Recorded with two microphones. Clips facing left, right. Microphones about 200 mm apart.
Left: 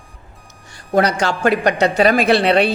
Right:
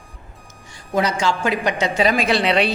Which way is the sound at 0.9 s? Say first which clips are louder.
Left 3 dB; 65° left (ahead or behind).